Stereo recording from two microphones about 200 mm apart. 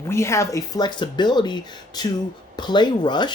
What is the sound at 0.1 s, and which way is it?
Speech, 15° left (ahead or behind).